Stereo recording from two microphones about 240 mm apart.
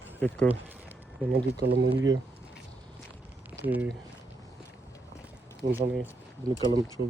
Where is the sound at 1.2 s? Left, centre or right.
Centre.